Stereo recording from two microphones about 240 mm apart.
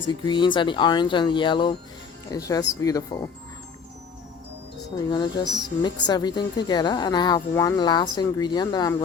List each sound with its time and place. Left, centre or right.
0.3 s speech: centre
5.0 s speech: centre